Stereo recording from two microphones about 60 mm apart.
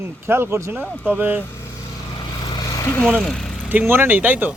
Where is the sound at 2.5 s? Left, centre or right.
Left.